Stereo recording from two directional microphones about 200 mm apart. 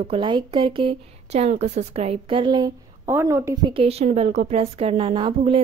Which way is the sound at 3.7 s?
30° right (ahead or behind).